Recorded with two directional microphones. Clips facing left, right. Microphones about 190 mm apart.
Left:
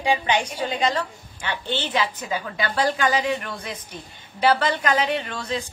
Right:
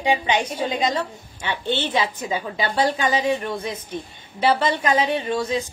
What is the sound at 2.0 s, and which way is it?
A woman's voice, 25° right (ahead or behind).